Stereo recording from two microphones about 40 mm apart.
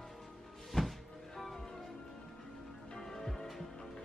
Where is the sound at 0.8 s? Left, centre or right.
Centre.